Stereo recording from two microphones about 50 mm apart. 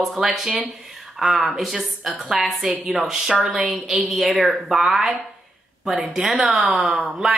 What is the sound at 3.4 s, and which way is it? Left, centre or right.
Speech, right.